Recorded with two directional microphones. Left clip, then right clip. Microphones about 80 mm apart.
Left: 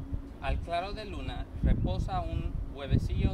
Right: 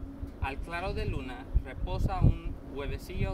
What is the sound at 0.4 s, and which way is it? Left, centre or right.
Speech, left.